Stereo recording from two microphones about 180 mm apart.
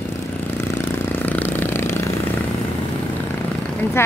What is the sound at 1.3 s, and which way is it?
Vehicle, 10° left (ahead or behind).